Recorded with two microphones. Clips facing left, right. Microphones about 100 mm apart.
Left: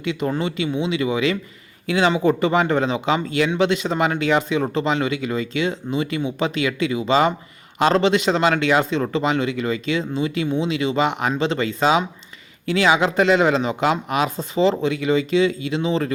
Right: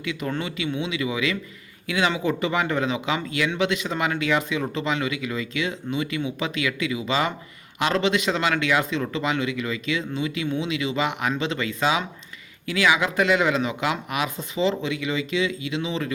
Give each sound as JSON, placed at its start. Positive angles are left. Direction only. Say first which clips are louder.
{"t": 0.0, "sound": "speech", "louder": "left 5 dB", "side_deg": 25}